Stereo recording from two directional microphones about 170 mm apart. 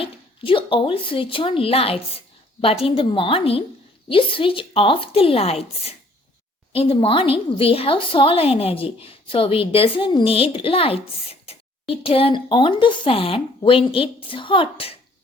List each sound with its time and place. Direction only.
0.0 s a woman's voice: 30° left (ahead or behind)